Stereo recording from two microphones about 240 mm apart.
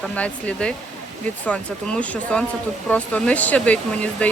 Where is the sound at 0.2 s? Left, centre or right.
Centre.